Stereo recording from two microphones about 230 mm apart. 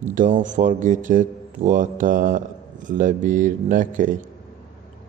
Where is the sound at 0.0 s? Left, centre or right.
Right.